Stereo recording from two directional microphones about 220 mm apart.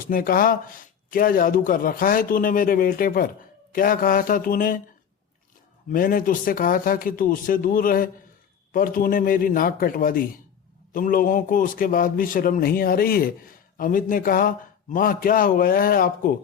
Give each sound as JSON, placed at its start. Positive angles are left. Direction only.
{"t": 0.0, "sound": "a man's voice", "side_deg": 40}
{"t": 5.9, "sound": "a man's voice", "side_deg": 40}